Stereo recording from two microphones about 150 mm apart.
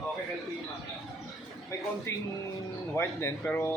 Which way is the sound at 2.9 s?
15° left (ahead or behind).